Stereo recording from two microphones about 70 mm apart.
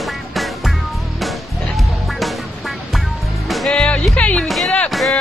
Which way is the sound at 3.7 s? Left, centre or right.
Centre.